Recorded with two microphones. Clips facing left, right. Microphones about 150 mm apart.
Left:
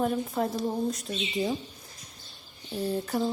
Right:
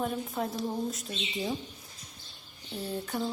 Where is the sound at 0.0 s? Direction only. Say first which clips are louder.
Left 5 dB; centre (ahead or behind).